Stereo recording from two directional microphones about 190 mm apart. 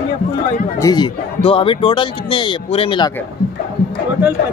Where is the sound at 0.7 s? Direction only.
20° left (ahead or behind).